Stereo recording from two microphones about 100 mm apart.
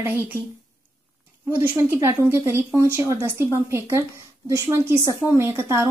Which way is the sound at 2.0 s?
30° right (ahead or behind).